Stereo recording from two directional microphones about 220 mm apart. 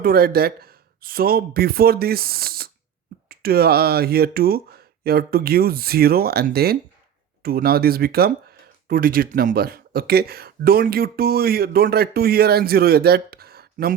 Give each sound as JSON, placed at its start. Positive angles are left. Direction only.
{"t": 0.0, "sound": "speech", "side_deg": -45}